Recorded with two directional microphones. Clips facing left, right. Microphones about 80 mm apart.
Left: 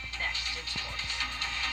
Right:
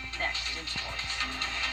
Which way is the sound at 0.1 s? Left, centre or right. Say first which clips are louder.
Right 2 dB; right.